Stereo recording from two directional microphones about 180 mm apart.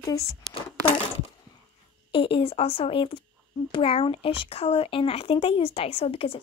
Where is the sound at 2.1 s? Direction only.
30° left (ahead or behind).